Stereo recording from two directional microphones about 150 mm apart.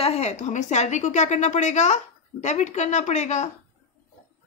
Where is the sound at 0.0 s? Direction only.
45° left (ahead or behind).